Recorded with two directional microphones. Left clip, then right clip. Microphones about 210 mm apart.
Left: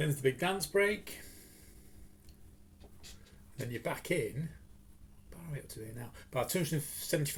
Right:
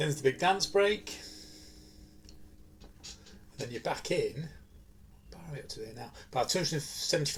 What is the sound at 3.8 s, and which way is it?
Speech, 45° left (ahead or behind).